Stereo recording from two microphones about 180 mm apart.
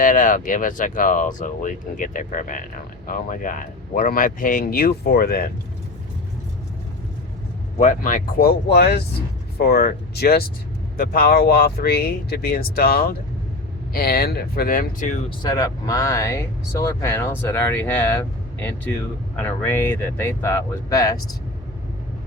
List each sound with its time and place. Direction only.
0.0 s speech: 45° left (ahead or behind)
7.8 s speech: 45° left (ahead or behind)
15.4 s speech: 20° left (ahead or behind)
19.4 s speech: 10° left (ahead or behind)